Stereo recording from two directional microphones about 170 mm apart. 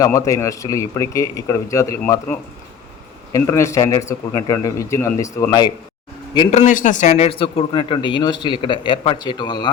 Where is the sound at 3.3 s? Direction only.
20° left (ahead or behind).